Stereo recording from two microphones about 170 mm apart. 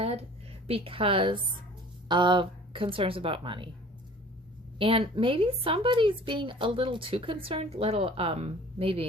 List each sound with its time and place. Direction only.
0.0 s a sound: 35° right (ahead or behind)
0.7 s speech: 30° right (ahead or behind)
4.8 s speech: 30° right (ahead or behind)